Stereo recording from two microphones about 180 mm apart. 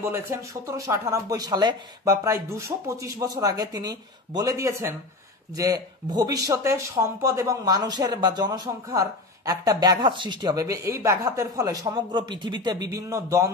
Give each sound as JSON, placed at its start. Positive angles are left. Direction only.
{"t": 0.0, "sound": "speech", "side_deg": -15}